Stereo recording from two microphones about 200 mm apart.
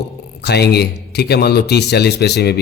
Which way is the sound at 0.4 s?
55° left (ahead or behind).